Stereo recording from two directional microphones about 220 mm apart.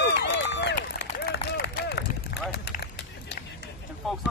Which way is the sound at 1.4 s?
45° left (ahead or behind).